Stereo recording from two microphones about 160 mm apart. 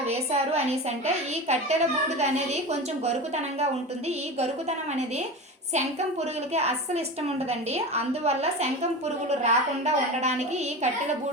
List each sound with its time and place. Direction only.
0.1 s a sound: 40° right (ahead or behind)
1.0 s a woman's voice: 45° right (ahead or behind)
6.5 s a woman's voice: 45° right (ahead or behind)